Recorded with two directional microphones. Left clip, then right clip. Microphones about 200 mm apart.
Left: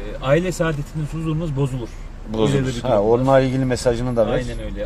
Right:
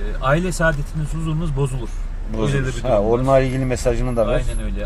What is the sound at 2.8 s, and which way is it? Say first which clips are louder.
Speech: left 1 dB; 15° left (ahead or behind).